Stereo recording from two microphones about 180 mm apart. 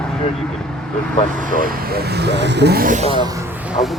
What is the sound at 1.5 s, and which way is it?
Speech, 55° right (ahead or behind).